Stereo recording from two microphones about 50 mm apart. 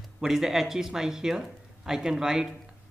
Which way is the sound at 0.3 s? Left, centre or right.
Centre.